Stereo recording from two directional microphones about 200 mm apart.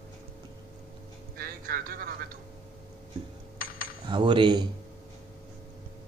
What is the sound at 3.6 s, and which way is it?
Cutlery, 50° left (ahead or behind).